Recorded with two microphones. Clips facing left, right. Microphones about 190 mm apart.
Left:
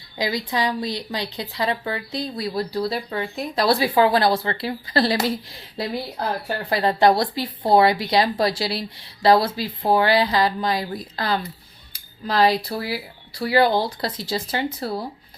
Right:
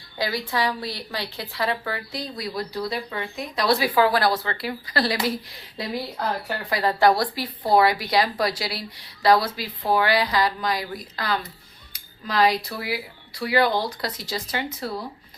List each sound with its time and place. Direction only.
0.2 s a woman's voice: 20° left (ahead or behind)
6.7 s a woman's voice: 25° left (ahead or behind)